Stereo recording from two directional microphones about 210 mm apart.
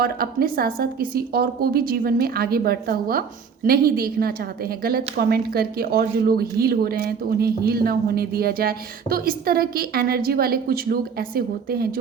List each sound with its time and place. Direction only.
0.0 s speech: 45° right (ahead or behind)